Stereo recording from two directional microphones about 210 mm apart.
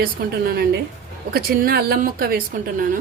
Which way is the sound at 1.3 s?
45° right (ahead or behind).